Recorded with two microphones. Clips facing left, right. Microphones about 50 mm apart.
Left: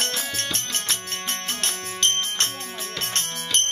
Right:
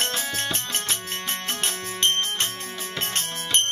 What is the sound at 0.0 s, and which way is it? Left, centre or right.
Music, centre.